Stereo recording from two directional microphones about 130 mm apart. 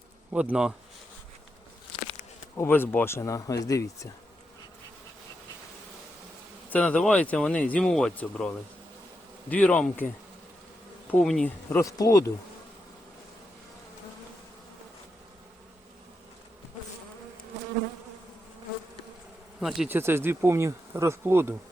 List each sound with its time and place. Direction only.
0.3 s speech: 10° right (ahead or behind)
2.6 s speech: 15° left (ahead or behind)
6.7 s speech: 10° left (ahead or behind)
11.2 s speech: 5° left (ahead or behind)
11.7 s speech: 25° left (ahead or behind)
19.5 s speech: 5° right (ahead or behind)
19.9 s bee: 20° right (ahead or behind)